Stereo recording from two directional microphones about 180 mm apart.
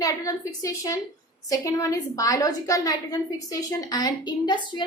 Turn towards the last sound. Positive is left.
turn(degrees=25)  # may be behind; listen again after turning